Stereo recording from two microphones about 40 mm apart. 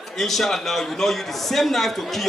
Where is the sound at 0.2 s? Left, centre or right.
Centre.